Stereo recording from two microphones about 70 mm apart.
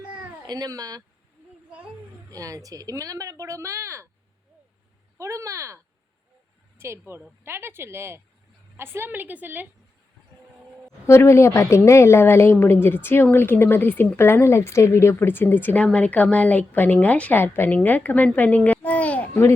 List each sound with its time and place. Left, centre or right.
0.4 s speech: right
2.3 s speech: right
5.1 s a woman's voice: right
11.0 s a woman's voice: left
17.4 s a woman's voice: left
19.3 s a woman's voice: left